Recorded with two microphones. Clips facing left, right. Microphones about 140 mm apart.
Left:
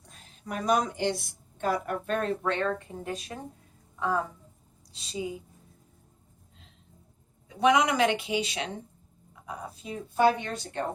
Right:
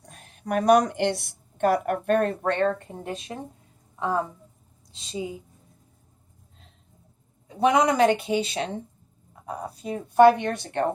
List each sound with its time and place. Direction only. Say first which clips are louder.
0.0 s a woman's voice: right 6 dB; 60° right (ahead or behind)
3.0 s speech: right 2 dB; 25° right (ahead or behind)
7.4 s a woman's voice: right 3 dB; 35° right (ahead or behind); by 10.8 s 60° right (ahead or behind)